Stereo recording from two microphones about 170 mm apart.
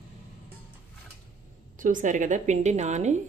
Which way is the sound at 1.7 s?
50° right (ahead or behind).